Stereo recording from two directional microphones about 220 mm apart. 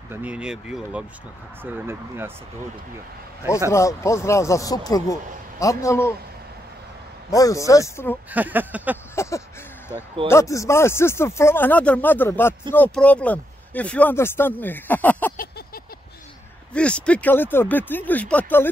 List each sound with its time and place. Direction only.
0.1 s speech: 5° right (ahead or behind)
3.7 s speech: 15° left (ahead or behind)
7.2 s speech: 15° left (ahead or behind)
8.3 s speech: 5° right (ahead or behind)
9.1 s a sound: 15° left (ahead or behind)
10.2 s speech: 15° left (ahead or behind)
15.3 s a sound: 40° left (ahead or behind)
16.7 s speech: 5° left (ahead or behind)